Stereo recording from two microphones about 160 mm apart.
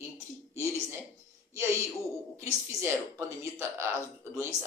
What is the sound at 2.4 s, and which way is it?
A woman's voice, 15° right (ahead or behind).